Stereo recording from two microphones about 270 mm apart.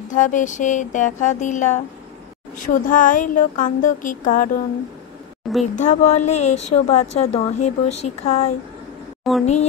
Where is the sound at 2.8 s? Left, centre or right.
Left.